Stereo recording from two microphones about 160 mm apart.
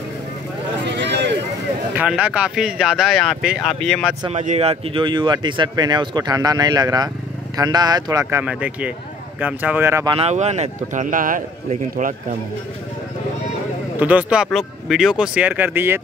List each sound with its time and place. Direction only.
0.8 s a sound: 90° right
2.0 s speech: 10° right (ahead or behind)
4.3 s speech: 45° right (ahead or behind); by 10.1 s 15° right (ahead or behind)
10.1 s speech: 40° right (ahead or behind)
13.9 s speech: 10° right (ahead or behind)